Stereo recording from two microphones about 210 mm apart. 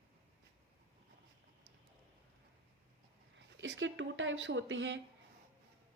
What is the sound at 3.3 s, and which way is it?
Speech, 65° right (ahead or behind).